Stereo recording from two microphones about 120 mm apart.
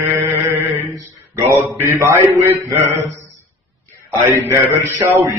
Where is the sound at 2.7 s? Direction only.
25° right (ahead or behind).